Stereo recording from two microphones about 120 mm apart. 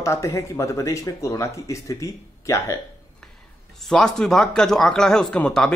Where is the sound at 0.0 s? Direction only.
25° left (ahead or behind).